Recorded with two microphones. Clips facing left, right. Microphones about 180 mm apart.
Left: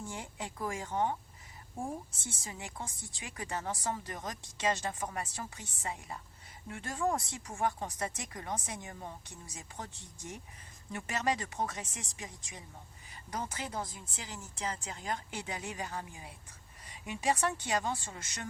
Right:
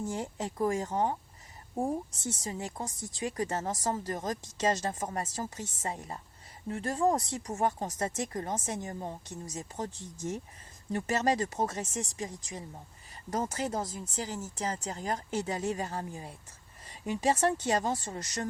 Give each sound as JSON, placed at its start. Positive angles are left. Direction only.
{"t": 0.0, "sound": "speech", "side_deg": -40}